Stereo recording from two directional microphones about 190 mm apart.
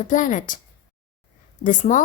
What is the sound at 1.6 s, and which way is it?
Speech, 40° left (ahead or behind).